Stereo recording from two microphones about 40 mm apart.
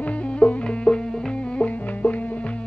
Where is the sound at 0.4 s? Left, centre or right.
Centre.